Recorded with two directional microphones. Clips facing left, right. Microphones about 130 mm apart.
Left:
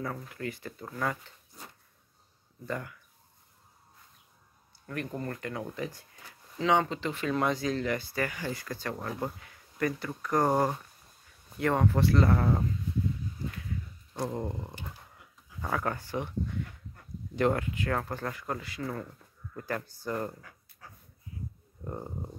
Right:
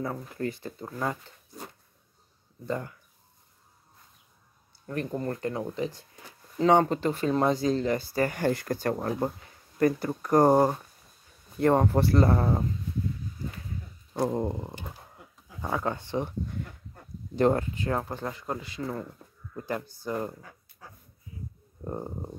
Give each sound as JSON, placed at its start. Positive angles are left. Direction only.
{"t": 0.3, "sound": "speech", "side_deg": -30}
{"t": 2.6, "sound": "speech", "side_deg": -25}
{"t": 4.8, "sound": "speech", "side_deg": -30}
{"t": 6.6, "sound": "speech", "side_deg": -45}
{"t": 8.4, "sound": "speech", "side_deg": -60}
{"t": 8.9, "sound": "speech", "side_deg": -35}
{"t": 11.6, "sound": "speech", "side_deg": -35}
{"t": 14.1, "sound": "speech", "side_deg": -30}
{"t": 14.8, "sound": "a sound", "side_deg": -35}
{"t": 15.6, "sound": "speech", "side_deg": -20}
{"t": 21.8, "sound": "speech", "side_deg": -20}